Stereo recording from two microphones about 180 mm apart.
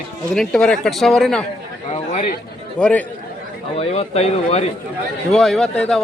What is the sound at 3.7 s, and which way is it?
Speech, 35° left (ahead or behind).